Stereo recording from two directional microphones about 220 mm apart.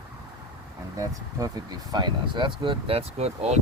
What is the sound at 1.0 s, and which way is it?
Speech, 15° right (ahead or behind).